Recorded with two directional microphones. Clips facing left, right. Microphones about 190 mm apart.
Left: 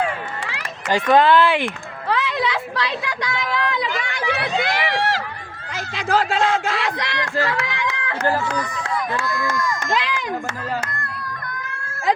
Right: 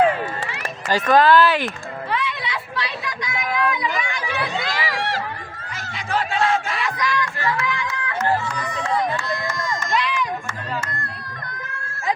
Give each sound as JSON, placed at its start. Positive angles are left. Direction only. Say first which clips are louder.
{"t": 0.9, "sound": "speech", "louder": "even", "side_deg": 20}
{"t": 2.0, "sound": "a sound", "louder": "left 5 dB", "side_deg": 90}
{"t": 3.8, "sound": "run", "louder": "left 1 dB", "side_deg": 85}
{"t": 5.7, "sound": "a sound", "louder": "left 5 dB", "side_deg": 90}
{"t": 8.7, "sound": "speech", "louder": "right 2 dB", "side_deg": -25}
{"t": 9.8, "sound": "run", "louder": "even", "side_deg": 90}